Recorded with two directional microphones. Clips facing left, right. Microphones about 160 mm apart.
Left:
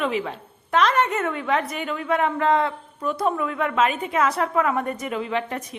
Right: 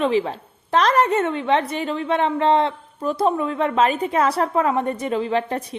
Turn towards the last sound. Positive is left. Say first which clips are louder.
# right 4 dB
turn(degrees=-35)  # may be behind; listen again after turning